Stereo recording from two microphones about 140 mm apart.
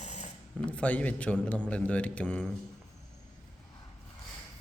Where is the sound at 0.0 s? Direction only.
55° left (ahead or behind).